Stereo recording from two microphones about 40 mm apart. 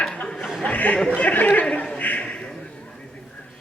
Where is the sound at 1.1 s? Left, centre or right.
Left.